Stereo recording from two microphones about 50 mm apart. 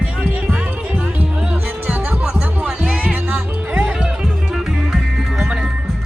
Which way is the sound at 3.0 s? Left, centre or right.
Right.